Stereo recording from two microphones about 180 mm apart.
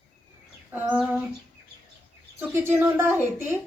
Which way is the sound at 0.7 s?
10° right (ahead or behind).